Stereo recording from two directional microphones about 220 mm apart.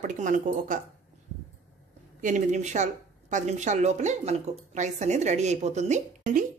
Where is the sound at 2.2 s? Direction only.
35° right (ahead or behind).